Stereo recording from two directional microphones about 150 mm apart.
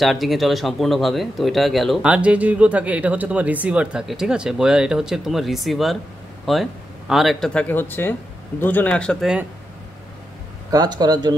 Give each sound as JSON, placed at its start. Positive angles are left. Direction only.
{"t": 0.0, "sound": "speech", "side_deg": 0}
{"t": 10.7, "sound": "speech", "side_deg": -25}